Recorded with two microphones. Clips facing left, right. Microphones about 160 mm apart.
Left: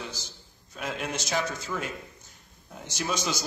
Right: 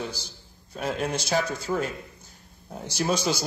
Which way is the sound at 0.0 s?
35° right (ahead or behind).